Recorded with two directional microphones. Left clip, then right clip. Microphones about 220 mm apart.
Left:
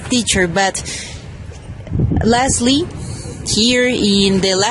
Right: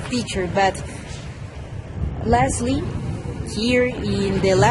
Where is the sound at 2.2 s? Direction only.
40° left (ahead or behind).